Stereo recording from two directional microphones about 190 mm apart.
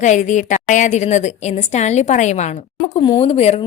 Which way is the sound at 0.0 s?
40° left (ahead or behind).